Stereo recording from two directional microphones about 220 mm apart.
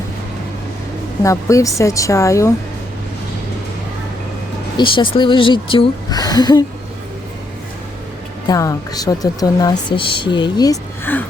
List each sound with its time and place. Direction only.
1.2 s a woman's voice: 15° left (ahead or behind)
4.8 s a woman's voice: 20° left (ahead or behind)
8.4 s a woman's voice: 15° left (ahead or behind)